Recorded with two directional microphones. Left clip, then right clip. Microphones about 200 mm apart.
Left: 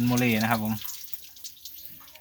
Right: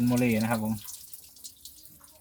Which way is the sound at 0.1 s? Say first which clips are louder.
Left 2 dB; 20° left (ahead or behind).